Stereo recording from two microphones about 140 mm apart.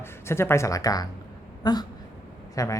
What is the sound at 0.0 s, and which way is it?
Speech, 15° left (ahead or behind).